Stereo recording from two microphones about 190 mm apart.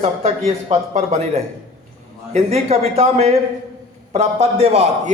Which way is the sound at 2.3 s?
35° right (ahead or behind).